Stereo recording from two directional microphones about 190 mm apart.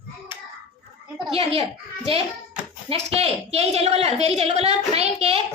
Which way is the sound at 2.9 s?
30° right (ahead or behind).